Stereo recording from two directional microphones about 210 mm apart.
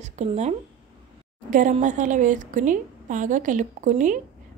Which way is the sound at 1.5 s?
35° right (ahead or behind).